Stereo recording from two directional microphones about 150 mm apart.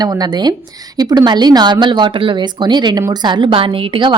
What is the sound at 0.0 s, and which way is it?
A woman's voice, 25° right (ahead or behind).